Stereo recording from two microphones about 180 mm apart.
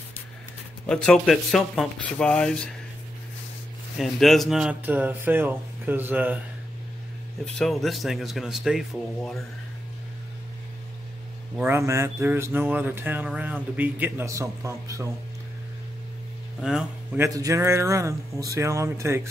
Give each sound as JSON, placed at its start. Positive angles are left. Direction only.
{"t": 0.8, "sound": "speech", "side_deg": 5}
{"t": 4.0, "sound": "speech", "side_deg": 0}
{"t": 7.4, "sound": "speech", "side_deg": 5}
{"t": 11.5, "sound": "speech", "side_deg": -10}
{"t": 16.6, "sound": "speech", "side_deg": -5}
{"t": 17.2, "sound": "speech", "side_deg": -20}